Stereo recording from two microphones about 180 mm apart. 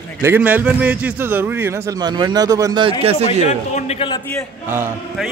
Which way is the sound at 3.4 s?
35° left (ahead or behind).